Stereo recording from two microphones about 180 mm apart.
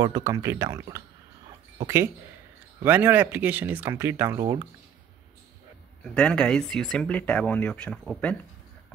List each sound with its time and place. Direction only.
0.0 s speech: 20° right (ahead or behind)
2.8 s speech: 10° right (ahead or behind)
6.1 s speech: 5° left (ahead or behind)